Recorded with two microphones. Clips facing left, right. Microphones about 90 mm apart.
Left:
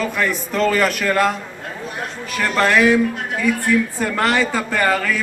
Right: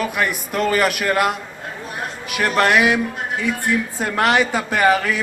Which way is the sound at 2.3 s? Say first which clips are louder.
Even; 15° right (ahead or behind).